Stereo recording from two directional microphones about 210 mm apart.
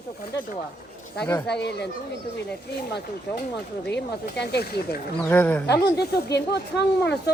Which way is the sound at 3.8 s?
55° left (ahead or behind).